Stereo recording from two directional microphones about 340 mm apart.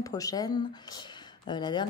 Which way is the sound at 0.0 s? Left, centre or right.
Centre.